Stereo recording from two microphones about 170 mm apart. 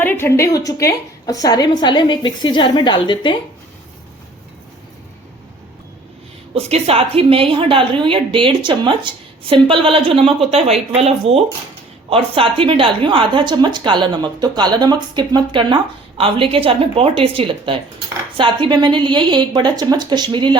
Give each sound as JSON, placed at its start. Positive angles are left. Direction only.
{"t": 0.0, "sound": "a woman's voice", "side_deg": 10}
{"t": 6.5, "sound": "a woman's voice", "side_deg": -35}